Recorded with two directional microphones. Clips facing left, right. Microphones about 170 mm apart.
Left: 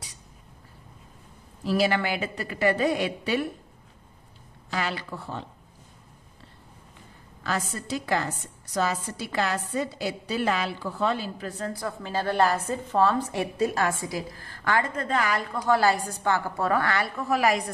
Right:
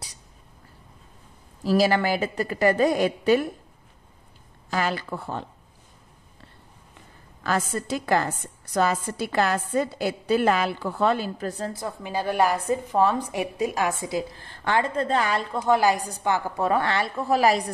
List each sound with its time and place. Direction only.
1.6 s a woman's voice: 40° right (ahead or behind)
4.6 s a woman's voice: 45° right (ahead or behind)
7.4 s a woman's voice: 50° right (ahead or behind)
11.7 s a woman's voice: 20° right (ahead or behind)